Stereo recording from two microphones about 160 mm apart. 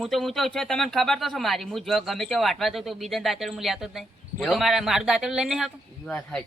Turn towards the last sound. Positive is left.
turn(degrees=5)  # may be behind; listen again after turning